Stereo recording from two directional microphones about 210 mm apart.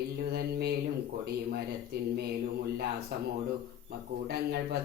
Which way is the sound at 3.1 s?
50° right (ahead or behind).